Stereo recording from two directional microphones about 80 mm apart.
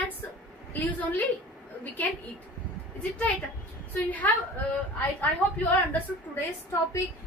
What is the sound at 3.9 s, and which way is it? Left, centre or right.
Speech, left.